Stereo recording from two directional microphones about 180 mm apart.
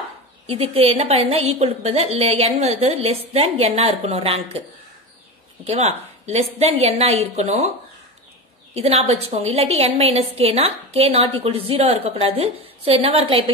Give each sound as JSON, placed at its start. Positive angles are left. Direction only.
{"t": 0.5, "sound": "a woman's voice", "side_deg": -35}
{"t": 5.7, "sound": "a woman's voice", "side_deg": -35}
{"t": 8.7, "sound": "a woman's voice", "side_deg": -35}